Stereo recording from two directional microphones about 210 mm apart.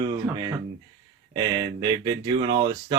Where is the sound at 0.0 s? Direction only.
20° right (ahead or behind).